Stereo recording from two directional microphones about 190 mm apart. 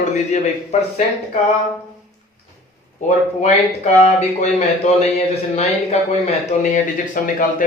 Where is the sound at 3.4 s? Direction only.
40° left (ahead or behind).